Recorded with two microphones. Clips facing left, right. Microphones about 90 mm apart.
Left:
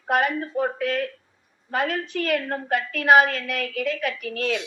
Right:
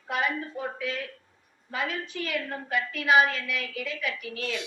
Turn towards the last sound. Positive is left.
turn(degrees=55)  # may be behind; listen again after turning